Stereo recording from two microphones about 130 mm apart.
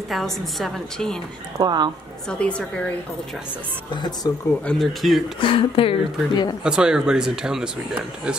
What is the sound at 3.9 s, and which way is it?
Speech, 35° left (ahead or behind).